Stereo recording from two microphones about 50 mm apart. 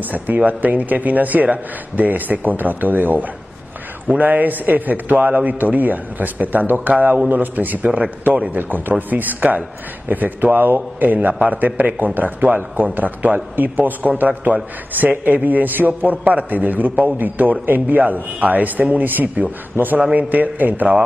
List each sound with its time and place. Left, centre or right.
0.4 s a man's voice: right